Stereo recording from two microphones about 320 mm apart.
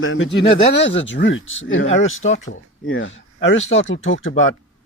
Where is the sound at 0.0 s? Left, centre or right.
Left.